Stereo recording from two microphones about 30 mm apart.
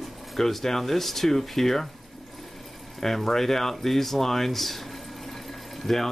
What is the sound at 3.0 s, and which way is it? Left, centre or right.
Speech, centre.